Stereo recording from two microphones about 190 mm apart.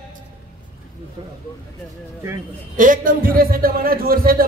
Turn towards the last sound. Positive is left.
turn(degrees=-50)  # may be behind; listen again after turning